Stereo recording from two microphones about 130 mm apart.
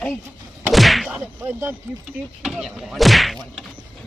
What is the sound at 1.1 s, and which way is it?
Music, 20° right (ahead or behind).